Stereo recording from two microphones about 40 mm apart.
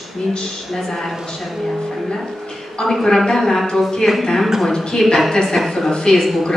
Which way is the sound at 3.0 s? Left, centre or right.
Centre.